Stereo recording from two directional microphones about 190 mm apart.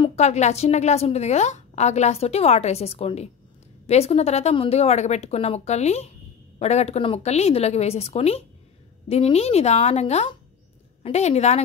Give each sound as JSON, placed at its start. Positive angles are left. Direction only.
{"t": 0.0, "sound": "a woman's voice", "side_deg": 35}